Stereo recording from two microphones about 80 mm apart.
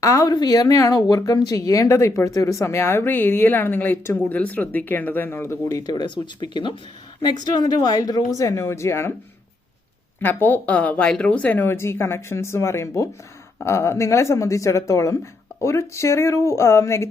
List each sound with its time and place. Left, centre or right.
0.0 s speech: left
0.3 s speech: left
5.8 s speech: left
7.2 s speech: left
10.2 s speech: left